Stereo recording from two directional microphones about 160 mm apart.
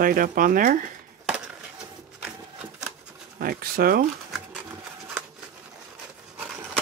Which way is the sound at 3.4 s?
65° right (ahead or behind).